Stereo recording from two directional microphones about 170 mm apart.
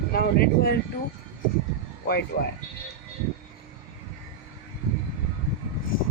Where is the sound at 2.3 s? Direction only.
60° left (ahead or behind).